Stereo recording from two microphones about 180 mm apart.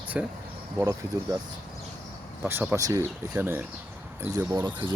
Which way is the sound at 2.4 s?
10° right (ahead or behind).